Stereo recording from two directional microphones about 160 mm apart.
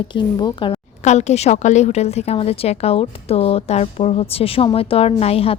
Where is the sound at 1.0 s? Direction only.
45° left (ahead or behind).